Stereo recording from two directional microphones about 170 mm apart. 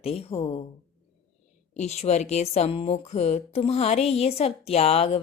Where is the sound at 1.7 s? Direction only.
40° left (ahead or behind).